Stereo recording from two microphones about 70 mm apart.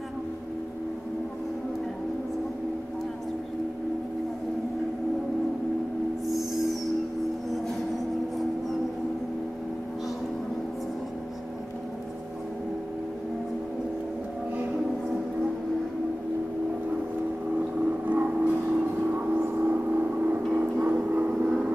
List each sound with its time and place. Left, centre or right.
6.2 s music: centre
17.6 s vehicle: right